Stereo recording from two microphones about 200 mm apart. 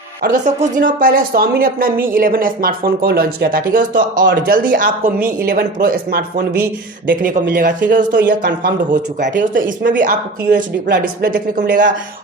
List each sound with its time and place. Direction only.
0.2 s speech: 40° right (ahead or behind)